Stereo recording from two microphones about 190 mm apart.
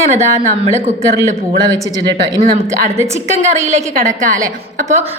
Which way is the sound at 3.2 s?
35° right (ahead or behind).